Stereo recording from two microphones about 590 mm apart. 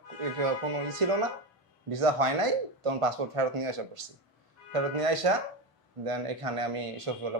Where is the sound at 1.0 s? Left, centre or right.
Right.